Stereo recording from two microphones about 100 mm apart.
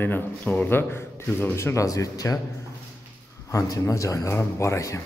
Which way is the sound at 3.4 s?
35° left (ahead or behind).